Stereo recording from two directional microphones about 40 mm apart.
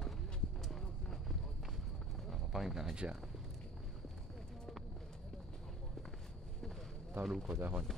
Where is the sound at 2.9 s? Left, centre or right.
Right.